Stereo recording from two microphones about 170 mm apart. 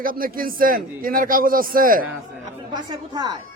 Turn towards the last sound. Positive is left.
turn(degrees=-25)  # may be behind; listen again after turning